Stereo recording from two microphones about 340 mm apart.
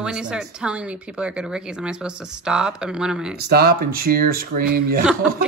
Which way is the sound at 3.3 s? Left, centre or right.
Right.